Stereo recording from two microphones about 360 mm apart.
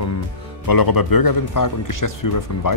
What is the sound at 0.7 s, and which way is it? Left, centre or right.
Speech, left.